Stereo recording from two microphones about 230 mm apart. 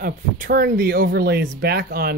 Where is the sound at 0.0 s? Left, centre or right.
Right.